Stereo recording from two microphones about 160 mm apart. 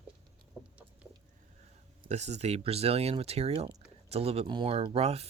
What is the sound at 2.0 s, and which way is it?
Speech, 45° right (ahead or behind).